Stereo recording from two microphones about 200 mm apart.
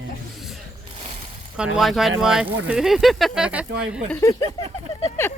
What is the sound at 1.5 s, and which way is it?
Speech, 5° right (ahead or behind).